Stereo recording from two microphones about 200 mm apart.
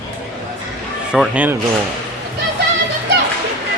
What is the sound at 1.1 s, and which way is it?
Speech, 5° right (ahead or behind).